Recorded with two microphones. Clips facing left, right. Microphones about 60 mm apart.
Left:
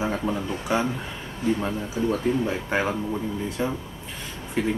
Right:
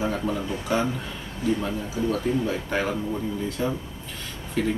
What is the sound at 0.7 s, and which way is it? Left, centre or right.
Speech, centre.